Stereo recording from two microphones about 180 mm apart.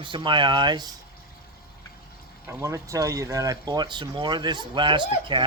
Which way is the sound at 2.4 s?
15° right (ahead or behind).